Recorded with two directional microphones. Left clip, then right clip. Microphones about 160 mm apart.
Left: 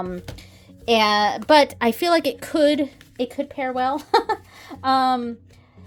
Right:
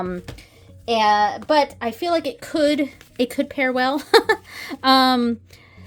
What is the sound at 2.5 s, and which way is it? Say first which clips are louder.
Speech: even; 5° left (ahead or behind).